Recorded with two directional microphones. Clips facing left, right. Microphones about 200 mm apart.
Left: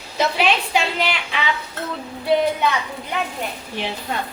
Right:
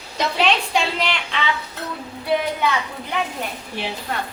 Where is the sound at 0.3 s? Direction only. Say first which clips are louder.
Right 3 dB; 5° left (ahead or behind).